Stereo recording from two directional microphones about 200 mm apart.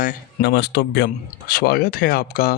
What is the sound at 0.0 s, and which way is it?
Speech, 40° left (ahead or behind).